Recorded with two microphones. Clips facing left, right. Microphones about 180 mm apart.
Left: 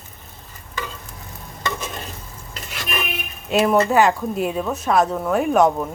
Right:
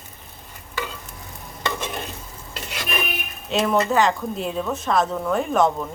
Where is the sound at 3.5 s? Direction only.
10° left (ahead or behind).